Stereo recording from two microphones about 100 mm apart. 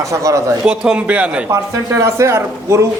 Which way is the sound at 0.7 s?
10° right (ahead or behind).